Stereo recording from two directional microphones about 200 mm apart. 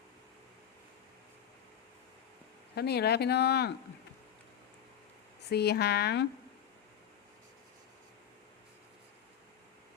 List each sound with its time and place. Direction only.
2.7 s speech: 55° left (ahead or behind)
5.5 s speech: 55° left (ahead or behind)